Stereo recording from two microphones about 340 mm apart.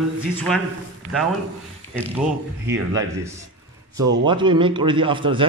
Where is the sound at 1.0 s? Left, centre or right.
Right.